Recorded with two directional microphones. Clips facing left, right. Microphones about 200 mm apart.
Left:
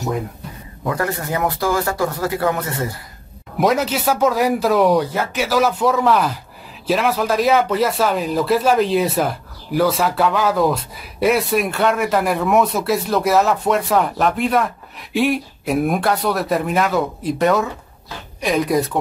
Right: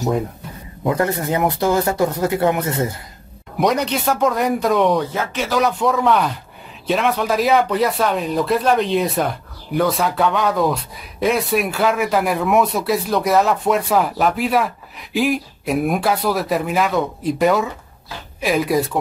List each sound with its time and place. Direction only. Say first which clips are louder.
0.8 s speech: right 3 dB; 20° right (ahead or behind)
3.5 s speech: left 1 dB; centre (ahead or behind)